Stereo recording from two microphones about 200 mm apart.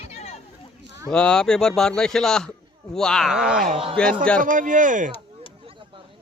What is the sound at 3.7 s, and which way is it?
Speech, 30° right (ahead or behind).